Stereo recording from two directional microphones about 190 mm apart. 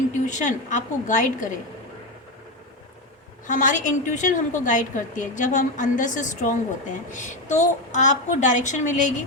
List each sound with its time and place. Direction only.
0.1 s a woman's voice: 40° left (ahead or behind)
3.4 s a woman's voice: 40° left (ahead or behind)